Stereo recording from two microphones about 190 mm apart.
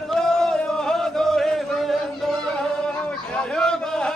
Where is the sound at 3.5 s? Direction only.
5° left (ahead or behind).